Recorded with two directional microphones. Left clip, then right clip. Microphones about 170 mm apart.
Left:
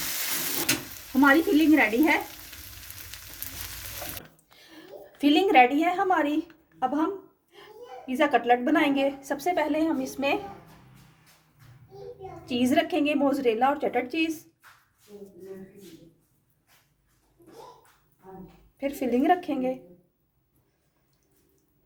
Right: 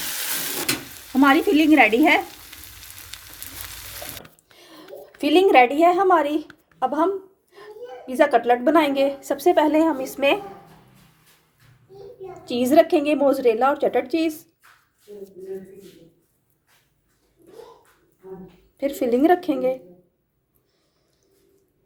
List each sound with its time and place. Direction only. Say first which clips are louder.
1.2 s speech: right 4 dB; 50° right (ahead or behind)
3.1 s a sound: right 6 dB; 20° right (ahead or behind)
4.5 s a woman's voice: right 5 dB; 40° right (ahead or behind)
8.0 s a woman's voice: right 5 dB; 40° right (ahead or behind)
12.5 s a woman's voice: right 8 dB; 40° right (ahead or behind)
18.8 s a woman's voice: right 7 dB; 40° right (ahead or behind)